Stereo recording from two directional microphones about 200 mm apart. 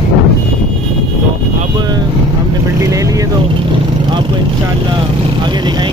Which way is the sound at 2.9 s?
15° right (ahead or behind).